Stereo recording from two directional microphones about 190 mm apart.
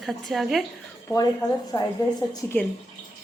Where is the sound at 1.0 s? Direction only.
20° left (ahead or behind).